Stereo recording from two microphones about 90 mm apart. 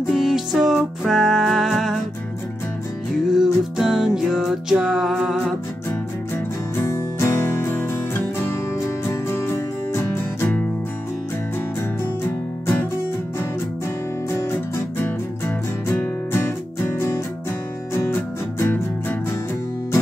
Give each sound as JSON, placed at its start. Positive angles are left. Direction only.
{"t": 0.1, "sound": "music", "side_deg": -5}
{"t": 3.3, "sound": "music", "side_deg": -5}
{"t": 6.8, "sound": "music", "side_deg": 30}
{"t": 14.4, "sound": "music", "side_deg": 30}
{"t": 18.6, "sound": "music", "side_deg": 25}